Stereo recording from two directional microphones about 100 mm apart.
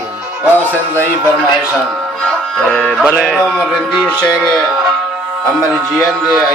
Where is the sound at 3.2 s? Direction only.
Centre (ahead or behind).